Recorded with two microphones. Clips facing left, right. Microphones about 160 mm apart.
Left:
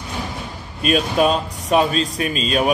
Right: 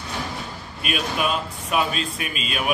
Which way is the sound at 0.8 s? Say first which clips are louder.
Left 8 dB; 35° left (ahead or behind).